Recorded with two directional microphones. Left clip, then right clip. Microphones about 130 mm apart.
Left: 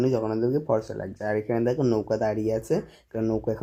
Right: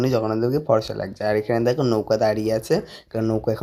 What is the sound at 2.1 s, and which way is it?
Speech, 15° right (ahead or behind).